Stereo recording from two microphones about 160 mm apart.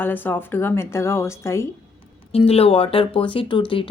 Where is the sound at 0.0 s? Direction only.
10° left (ahead or behind).